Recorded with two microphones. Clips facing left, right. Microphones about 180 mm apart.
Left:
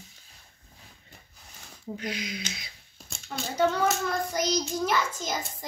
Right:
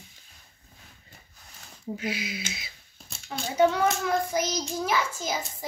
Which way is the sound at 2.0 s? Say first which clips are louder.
Right 1 dB; 5° right (ahead or behind).